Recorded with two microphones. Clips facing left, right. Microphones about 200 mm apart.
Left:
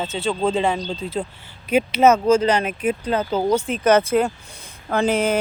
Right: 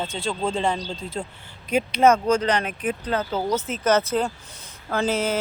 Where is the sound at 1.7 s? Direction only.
5° left (ahead or behind).